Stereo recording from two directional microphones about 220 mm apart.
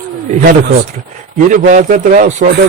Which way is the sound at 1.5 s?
35° right (ahead or behind).